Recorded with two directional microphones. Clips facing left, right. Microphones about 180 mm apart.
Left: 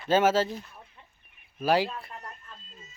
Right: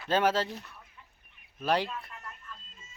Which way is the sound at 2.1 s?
35° left (ahead or behind).